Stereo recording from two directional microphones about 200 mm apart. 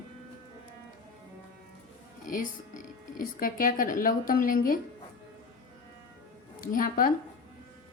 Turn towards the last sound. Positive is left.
turn(degrees=45)  # may be behind; listen again after turning